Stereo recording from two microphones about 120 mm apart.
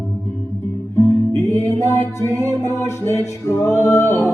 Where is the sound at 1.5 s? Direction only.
25° left (ahead or behind).